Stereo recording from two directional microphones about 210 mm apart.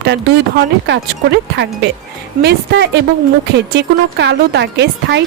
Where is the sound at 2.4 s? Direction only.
50° right (ahead or behind).